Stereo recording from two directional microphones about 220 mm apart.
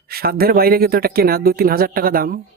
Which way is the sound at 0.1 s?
45° right (ahead or behind).